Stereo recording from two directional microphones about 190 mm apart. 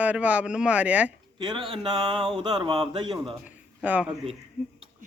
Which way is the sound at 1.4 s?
25° right (ahead or behind).